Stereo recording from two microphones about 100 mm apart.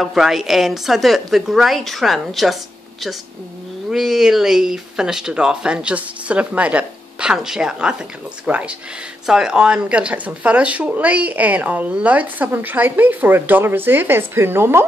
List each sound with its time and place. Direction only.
0.0 s a woman's voice: 5° right (ahead or behind); by 14.9 s 25° right (ahead or behind)